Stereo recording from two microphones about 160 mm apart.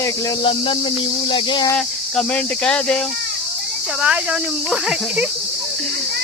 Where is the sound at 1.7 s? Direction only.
5° left (ahead or behind).